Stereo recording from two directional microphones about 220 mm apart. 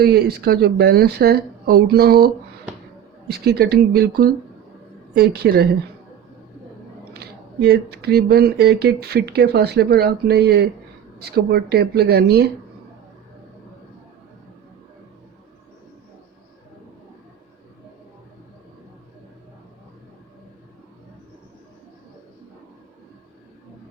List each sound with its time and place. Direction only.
0.0 s speech: 45° right (ahead or behind)
7.1 s speech: 50° right (ahead or behind)